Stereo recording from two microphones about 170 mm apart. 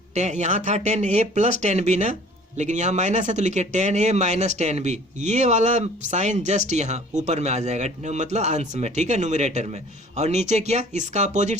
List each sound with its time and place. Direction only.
0.1 s speech: 45° right (ahead or behind)